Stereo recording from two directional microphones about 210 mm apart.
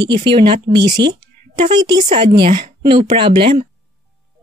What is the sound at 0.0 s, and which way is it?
Speech, 20° right (ahead or behind).